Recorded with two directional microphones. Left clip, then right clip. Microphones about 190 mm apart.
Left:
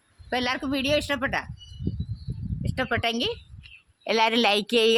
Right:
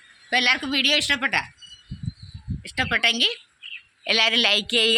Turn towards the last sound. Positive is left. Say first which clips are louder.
# right 1 dB
turn(degrees=50)  # may be behind; listen again after turning